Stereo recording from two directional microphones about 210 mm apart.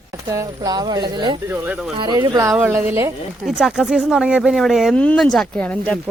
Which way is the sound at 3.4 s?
Centre (ahead or behind).